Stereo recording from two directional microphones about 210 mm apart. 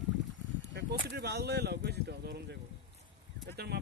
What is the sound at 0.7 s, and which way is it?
Speech, 50° right (ahead or behind).